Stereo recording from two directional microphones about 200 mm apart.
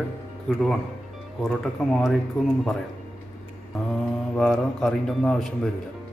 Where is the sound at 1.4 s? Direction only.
Centre (ahead or behind).